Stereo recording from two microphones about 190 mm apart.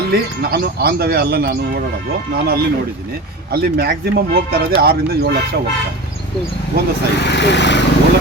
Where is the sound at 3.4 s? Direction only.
55° right (ahead or behind).